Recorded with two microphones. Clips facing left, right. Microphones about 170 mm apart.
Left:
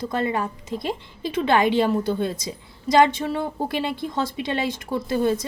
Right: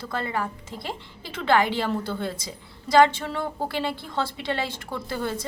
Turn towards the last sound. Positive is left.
turn(degrees=20)  # may be behind; listen again after turning